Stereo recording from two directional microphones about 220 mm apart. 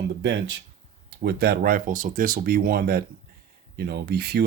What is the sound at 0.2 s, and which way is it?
Speech, 50° right (ahead or behind).